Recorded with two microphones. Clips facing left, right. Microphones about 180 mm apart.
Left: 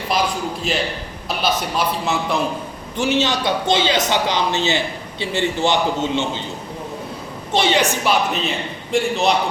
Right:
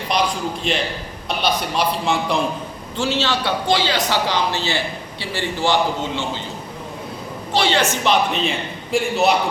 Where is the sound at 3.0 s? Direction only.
20° left (ahead or behind).